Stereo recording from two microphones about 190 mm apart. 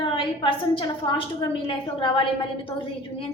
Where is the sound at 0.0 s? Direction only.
25° left (ahead or behind).